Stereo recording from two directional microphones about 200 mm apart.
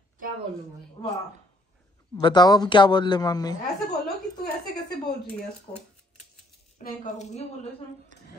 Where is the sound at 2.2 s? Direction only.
20° left (ahead or behind).